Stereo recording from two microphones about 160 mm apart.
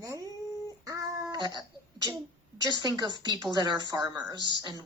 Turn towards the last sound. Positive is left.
turn(degrees=-25)  # may be behind; listen again after turning